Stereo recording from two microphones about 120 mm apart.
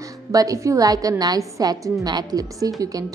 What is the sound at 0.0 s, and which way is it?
A woman's voice, 30° right (ahead or behind).